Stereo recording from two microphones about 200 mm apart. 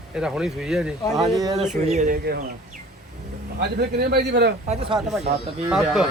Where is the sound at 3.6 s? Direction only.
55° right (ahead or behind).